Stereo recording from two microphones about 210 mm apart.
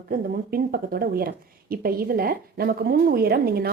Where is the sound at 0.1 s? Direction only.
45° right (ahead or behind).